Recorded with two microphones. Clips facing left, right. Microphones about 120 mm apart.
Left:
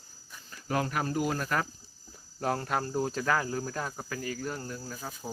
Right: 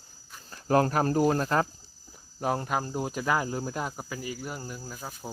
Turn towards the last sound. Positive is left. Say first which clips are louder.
# even
turn(degrees=-10)  # may be behind; listen again after turning